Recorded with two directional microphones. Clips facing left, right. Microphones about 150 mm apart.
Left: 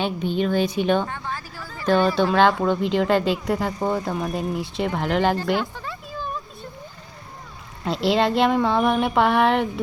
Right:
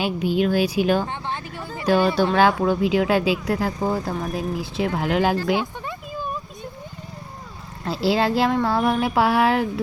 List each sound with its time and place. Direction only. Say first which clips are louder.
0.0 s speech: right 2 dB; 5° right (ahead or behind)
1.0 s a sound: right 2 dB; 25° right (ahead or behind)
1.9 s speech: even; 5° right (ahead or behind)
7.9 s speech: even; 5° right (ahead or behind)